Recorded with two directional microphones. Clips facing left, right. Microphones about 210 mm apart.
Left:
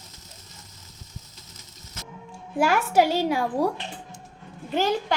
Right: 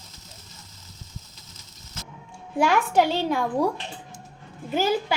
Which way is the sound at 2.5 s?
5° left (ahead or behind).